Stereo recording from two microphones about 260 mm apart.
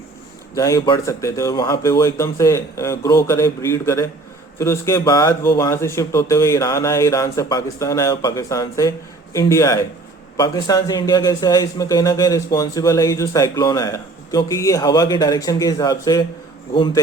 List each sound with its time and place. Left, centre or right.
0.5 s speech: centre